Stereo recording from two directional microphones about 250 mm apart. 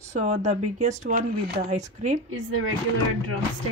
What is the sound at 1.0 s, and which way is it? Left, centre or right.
Speech, right.